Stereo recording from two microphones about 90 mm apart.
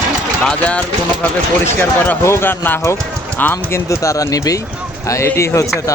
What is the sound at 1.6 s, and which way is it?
Speech, 25° left (ahead or behind).